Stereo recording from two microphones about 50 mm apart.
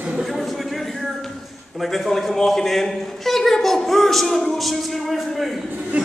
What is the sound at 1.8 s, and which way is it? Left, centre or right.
A man's voice, centre.